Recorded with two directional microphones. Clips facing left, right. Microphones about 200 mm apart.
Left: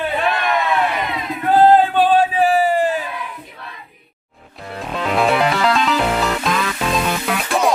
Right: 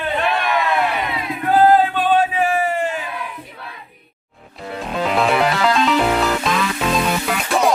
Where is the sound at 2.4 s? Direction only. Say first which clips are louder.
Left 4 dB; 35° left (ahead or behind).